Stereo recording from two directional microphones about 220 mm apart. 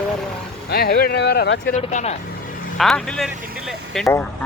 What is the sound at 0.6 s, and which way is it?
Speech, 45° left (ahead or behind).